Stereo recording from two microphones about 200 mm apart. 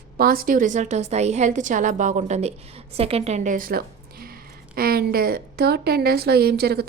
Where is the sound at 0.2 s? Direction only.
45° right (ahead or behind).